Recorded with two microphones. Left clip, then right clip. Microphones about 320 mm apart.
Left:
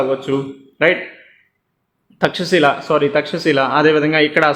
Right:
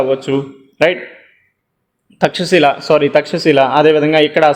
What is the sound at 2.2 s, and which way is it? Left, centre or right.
A man's voice, centre.